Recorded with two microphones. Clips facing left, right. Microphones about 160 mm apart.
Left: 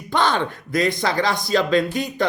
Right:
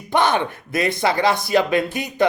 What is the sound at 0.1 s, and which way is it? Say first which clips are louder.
A man's voice: right 2 dB; 20° right (ahead or behind).